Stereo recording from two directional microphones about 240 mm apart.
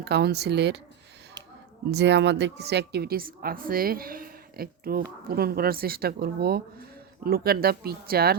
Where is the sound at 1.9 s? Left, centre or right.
Right.